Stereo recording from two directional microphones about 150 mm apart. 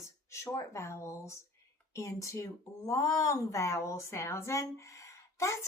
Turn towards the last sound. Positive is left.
turn(degrees=20)  # may be behind; listen again after turning